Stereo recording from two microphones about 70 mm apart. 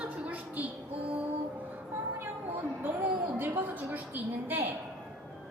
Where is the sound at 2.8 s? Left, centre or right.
Right.